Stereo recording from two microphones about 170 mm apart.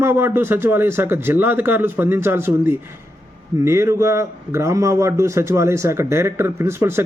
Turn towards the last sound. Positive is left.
turn(degrees=-15)  # may be behind; listen again after turning